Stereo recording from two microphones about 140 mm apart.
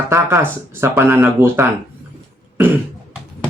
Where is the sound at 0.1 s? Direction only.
20° right (ahead or behind).